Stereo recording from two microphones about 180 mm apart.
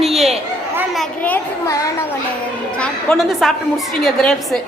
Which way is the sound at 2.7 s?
5° left (ahead or behind).